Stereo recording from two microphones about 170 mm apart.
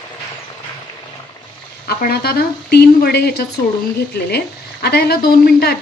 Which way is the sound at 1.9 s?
65° left (ahead or behind).